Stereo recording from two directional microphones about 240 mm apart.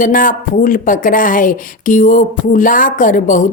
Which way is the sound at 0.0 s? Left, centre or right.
Left.